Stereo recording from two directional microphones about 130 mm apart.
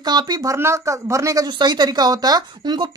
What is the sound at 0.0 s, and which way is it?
Speech, 35° right (ahead or behind).